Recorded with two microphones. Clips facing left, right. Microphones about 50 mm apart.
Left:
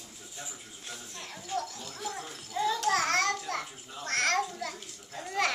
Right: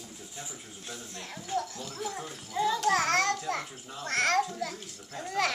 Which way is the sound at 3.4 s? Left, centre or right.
Centre.